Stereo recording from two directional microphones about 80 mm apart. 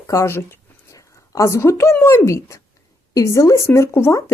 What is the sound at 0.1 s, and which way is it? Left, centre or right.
Speech, left.